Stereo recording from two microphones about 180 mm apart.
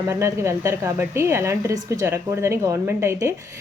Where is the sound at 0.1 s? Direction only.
15° right (ahead or behind).